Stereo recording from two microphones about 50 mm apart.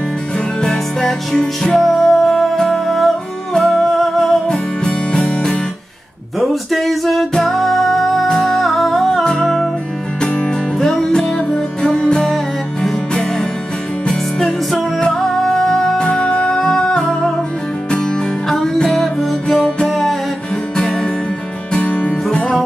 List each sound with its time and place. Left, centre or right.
0.6 s music: centre
4.5 s music: centre
6.4 s music: centre
10.2 s music: left
10.8 s music: centre
18.5 s music: centre
21.7 s music: left